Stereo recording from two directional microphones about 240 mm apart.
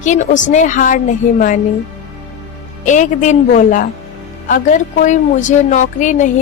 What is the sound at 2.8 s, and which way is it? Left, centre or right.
A woman's voice, left.